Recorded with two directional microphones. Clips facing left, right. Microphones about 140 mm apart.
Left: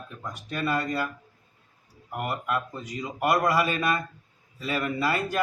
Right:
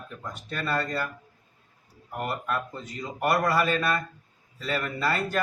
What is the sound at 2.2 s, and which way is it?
Speech, 15° left (ahead or behind).